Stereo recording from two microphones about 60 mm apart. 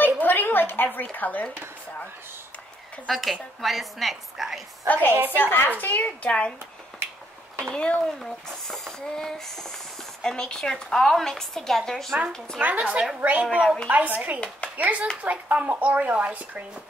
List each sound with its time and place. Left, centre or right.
0.0 s a sound: left
1.1 s speech: left
3.1 s a woman's voice: centre
4.8 s speech: left
6.0 s speech: centre
7.6 s speech: centre
12.5 s a woman's voice: right
13.8 s a woman's voice: right